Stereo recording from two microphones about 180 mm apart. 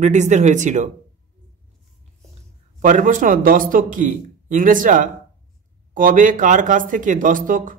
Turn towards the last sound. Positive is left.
turn(degrees=-50)  # may be behind; listen again after turning